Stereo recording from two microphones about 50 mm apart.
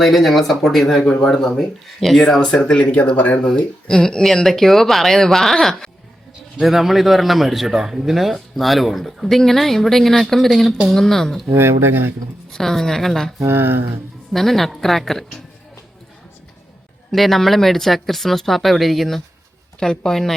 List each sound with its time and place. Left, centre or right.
0.0 s a man's voice: centre
2.5 s speech: left
3.4 s speech: centre
4.4 s a man's voice: centre
6.6 s a man's voice: centre
11.5 s speech: right
12.5 s speech: centre
14.3 s a man's voice: centre
17.1 s a man's voice: centre